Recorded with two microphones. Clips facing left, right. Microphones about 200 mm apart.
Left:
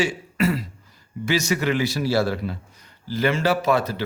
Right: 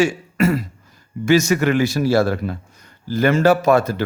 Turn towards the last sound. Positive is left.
turn(degrees=-45)  # may be behind; listen again after turning